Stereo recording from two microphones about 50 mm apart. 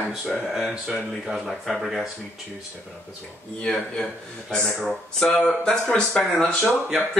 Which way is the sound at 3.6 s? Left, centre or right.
Centre.